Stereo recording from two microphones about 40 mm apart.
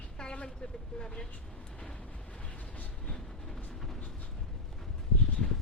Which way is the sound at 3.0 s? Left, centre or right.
Centre.